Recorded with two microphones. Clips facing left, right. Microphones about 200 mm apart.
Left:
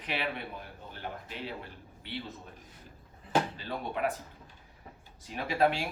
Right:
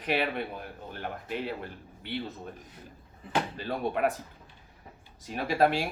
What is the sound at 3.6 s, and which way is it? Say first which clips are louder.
Speech: right 5 dB; 50° right (ahead or behind).